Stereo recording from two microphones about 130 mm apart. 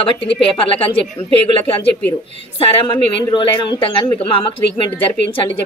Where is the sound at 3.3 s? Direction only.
40° left (ahead or behind).